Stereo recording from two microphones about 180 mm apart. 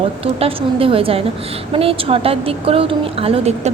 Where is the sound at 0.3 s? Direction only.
30° right (ahead or behind).